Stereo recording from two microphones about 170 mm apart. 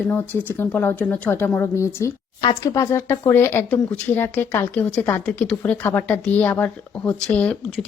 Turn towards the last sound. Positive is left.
turn(degrees=5)  # may be behind; listen again after turning